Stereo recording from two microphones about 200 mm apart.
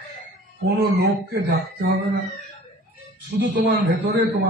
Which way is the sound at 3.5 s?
60° right (ahead or behind).